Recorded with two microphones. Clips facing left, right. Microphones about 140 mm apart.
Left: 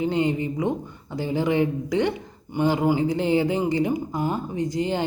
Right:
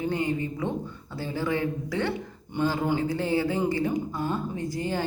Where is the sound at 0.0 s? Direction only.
20° left (ahead or behind).